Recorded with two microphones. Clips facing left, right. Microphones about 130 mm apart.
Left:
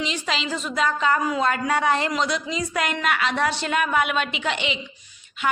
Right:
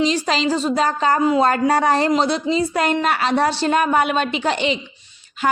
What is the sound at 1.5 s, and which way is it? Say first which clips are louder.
A woman's voice: right 5 dB; 35° right (ahead or behind).